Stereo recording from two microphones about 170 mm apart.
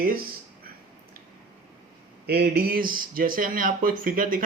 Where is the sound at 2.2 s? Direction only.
70° right (ahead or behind).